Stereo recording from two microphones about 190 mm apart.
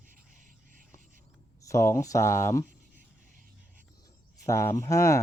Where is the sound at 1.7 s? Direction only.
15° left (ahead or behind).